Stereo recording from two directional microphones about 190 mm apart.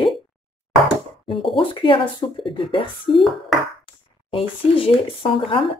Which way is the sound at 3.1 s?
Centre (ahead or behind).